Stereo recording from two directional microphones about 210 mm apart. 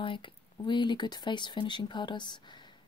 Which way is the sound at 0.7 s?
20° left (ahead or behind).